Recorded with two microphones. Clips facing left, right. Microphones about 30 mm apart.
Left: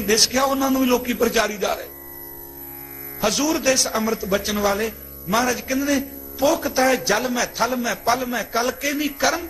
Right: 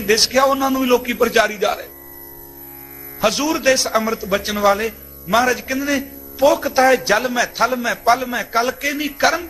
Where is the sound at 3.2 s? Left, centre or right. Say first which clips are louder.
Right 3 dB; centre.